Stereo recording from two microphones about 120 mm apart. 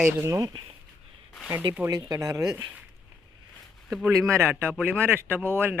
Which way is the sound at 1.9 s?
30° right (ahead or behind).